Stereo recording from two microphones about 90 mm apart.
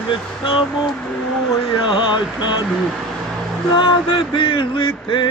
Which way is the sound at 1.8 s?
60° left (ahead or behind).